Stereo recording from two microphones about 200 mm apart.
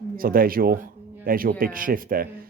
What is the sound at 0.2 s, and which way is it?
Speech, 45° right (ahead or behind).